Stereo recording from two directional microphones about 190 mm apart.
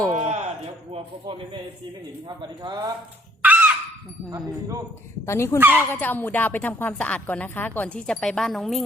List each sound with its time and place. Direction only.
0.1 s a sound: 40° right (ahead or behind)
2.2 s speech: 25° right (ahead or behind)
3.4 s crow: 10° right (ahead or behind)
4.3 s speech: 20° right (ahead or behind)
5.2 s speech: 15° left (ahead or behind)
5.5 s speech: 10° right (ahead or behind)
5.9 s speech: 10° left (ahead or behind)